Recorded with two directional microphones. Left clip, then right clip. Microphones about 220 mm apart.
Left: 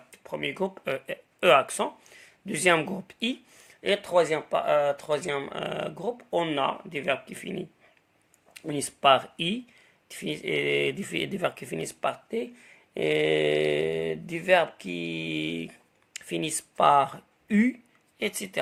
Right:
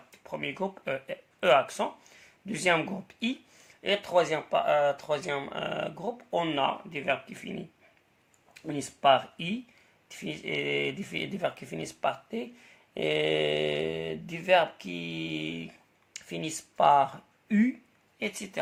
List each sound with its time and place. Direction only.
0.1 s speech: 40° left (ahead or behind)